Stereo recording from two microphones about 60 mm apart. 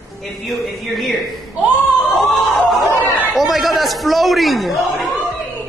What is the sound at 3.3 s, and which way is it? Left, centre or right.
A man's voice, centre.